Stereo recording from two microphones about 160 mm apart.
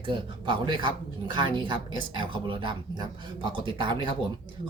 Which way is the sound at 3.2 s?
30° right (ahead or behind).